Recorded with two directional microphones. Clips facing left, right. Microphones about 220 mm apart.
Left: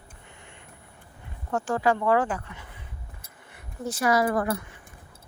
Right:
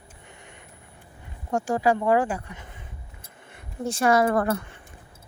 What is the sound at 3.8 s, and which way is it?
Speech, 25° right (ahead or behind).